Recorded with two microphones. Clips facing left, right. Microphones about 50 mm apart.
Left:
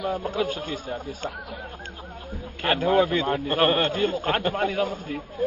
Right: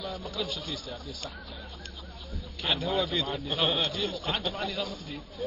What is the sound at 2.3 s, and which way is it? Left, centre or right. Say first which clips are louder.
A man's voice: left 7 dB; left.